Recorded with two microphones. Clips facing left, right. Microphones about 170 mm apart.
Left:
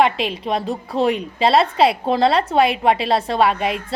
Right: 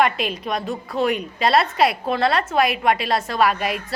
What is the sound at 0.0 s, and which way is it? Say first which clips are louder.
A woman's voice: left 3 dB; 25° left (ahead or behind).